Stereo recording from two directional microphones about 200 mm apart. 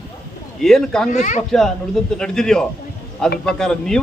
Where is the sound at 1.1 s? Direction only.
40° left (ahead or behind).